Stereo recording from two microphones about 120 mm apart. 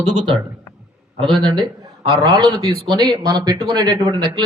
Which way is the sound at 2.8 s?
5° left (ahead or behind).